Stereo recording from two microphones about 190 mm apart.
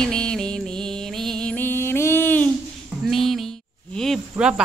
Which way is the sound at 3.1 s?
Centre (ahead or behind).